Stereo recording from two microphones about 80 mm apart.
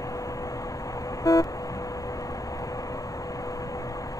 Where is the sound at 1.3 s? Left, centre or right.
Left.